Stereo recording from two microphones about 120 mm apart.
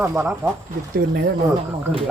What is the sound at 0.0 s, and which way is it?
Speech, 20° right (ahead or behind).